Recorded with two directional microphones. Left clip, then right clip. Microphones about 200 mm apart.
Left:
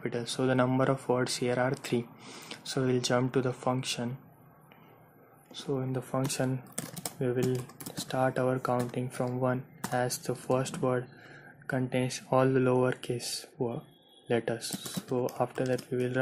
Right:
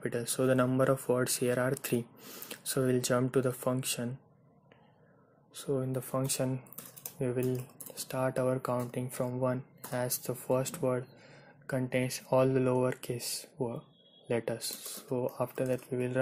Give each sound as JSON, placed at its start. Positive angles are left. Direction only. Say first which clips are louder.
{"t": 0.0, "sound": "speech", "louder": "even", "side_deg": -35}
{"t": 5.5, "sound": "speech", "louder": "even", "side_deg": -30}